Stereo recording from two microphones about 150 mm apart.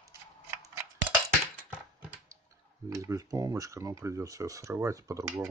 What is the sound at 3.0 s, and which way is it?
Speech, 20° right (ahead or behind).